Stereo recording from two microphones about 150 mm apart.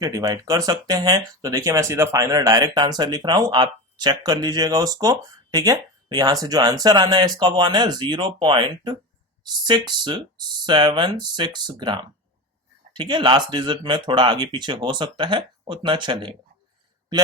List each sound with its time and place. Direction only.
0.0 s speech: 25° right (ahead or behind)